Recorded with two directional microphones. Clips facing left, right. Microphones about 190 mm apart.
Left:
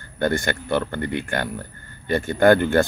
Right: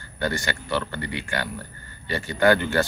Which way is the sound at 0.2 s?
50° left (ahead or behind).